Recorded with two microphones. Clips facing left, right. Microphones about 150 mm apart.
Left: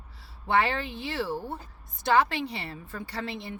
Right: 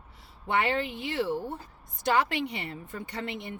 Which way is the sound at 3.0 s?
20° right (ahead or behind).